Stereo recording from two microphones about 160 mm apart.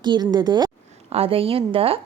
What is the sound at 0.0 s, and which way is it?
A woman's voice, 25° right (ahead or behind).